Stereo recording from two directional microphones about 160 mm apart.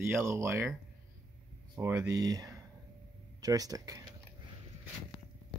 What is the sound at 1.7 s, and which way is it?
Speech, 20° right (ahead or behind).